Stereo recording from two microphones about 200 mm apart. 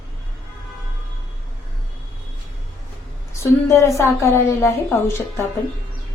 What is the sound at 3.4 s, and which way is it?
A woman's voice, 15° left (ahead or behind).